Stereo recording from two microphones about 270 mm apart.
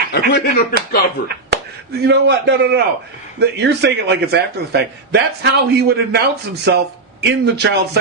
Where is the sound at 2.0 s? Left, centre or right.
Right.